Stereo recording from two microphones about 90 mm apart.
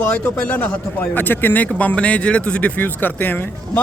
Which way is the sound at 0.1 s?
20° left (ahead or behind).